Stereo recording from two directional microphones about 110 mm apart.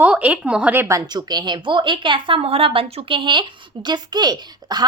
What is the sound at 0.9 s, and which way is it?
A woman's voice, 35° right (ahead or behind).